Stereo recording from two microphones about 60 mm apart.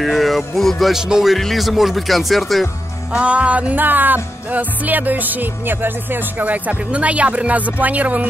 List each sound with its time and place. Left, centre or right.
0.0 s speech: centre
3.1 s music: right